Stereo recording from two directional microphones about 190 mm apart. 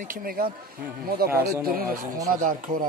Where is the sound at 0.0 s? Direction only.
50° right (ahead or behind).